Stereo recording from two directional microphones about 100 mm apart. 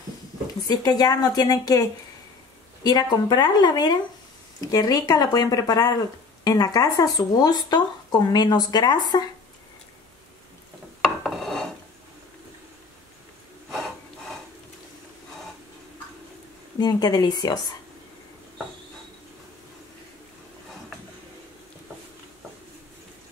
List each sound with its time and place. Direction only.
0.7 s speech: 40° left (ahead or behind)
11.0 s a sound: centre (ahead or behind)
16.8 s speech: 45° left (ahead or behind)